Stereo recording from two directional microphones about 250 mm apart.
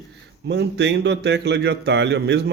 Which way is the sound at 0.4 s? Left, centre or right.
Right.